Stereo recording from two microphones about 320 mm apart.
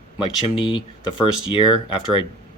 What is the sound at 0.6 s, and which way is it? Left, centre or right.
Speech, centre.